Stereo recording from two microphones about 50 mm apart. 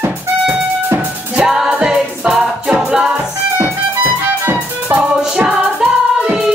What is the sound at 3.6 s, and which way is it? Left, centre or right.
Music, right.